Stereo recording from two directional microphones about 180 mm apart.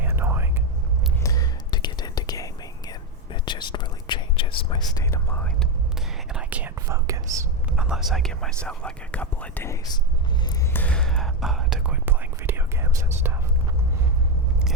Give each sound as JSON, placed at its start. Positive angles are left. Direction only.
{"t": 0.0, "sound": "whispering", "side_deg": -10}
{"t": 1.2, "sound": "whispering", "side_deg": 20}
{"t": 6.3, "sound": "whispering", "side_deg": -10}
{"t": 7.8, "sound": "whispering", "side_deg": -5}